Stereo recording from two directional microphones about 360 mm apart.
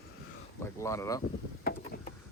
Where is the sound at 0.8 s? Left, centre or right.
Centre.